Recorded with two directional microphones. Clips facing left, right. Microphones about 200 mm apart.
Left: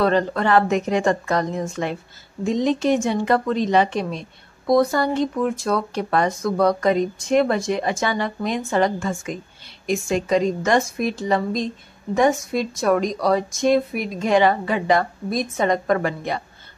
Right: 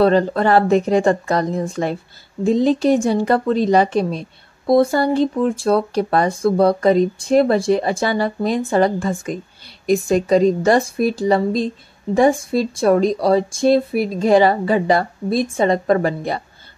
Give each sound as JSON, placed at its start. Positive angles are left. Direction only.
{"t": 0.0, "sound": "a woman's voice", "side_deg": -30}